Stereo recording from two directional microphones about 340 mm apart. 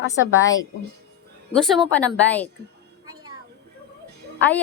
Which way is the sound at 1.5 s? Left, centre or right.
Centre.